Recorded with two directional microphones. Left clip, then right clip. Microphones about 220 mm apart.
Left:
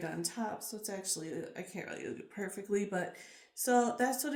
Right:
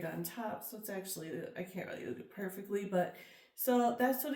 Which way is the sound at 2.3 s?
35° left (ahead or behind).